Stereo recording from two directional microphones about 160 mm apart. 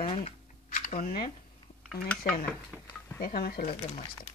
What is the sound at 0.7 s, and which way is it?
Camera, 55° left (ahead or behind).